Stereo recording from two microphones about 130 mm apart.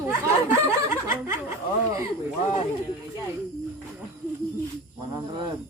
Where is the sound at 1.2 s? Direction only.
20° right (ahead or behind).